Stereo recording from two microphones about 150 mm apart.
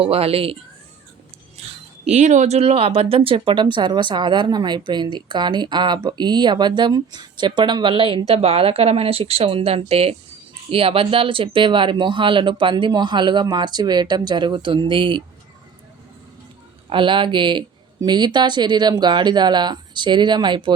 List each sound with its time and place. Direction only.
0.0 s speech: 40° right (ahead or behind)
2.0 s speech: 50° right (ahead or behind); by 15.2 s 35° right (ahead or behind)
16.9 s speech: 35° right (ahead or behind)